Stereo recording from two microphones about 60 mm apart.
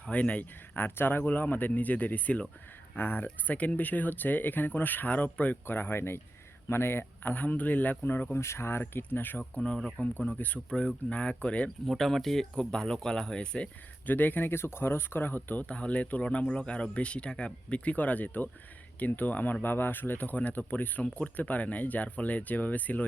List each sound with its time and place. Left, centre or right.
0.0 s speech: left
0.8 s speech: left
8.4 s speech: left
9.4 s speech: centre
10.0 s speech: left
11.9 s speech: centre
14.1 s speech: left